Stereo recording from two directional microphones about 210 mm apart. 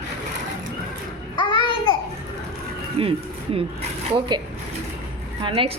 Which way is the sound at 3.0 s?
25° right (ahead or behind).